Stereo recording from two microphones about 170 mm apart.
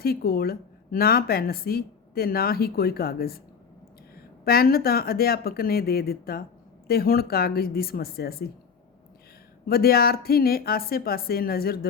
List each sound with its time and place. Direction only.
0.0 s speech: 65° left (ahead or behind)
9.6 s speech: 60° left (ahead or behind)